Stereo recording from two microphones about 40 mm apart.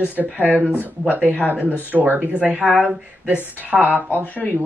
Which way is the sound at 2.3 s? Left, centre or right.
Right.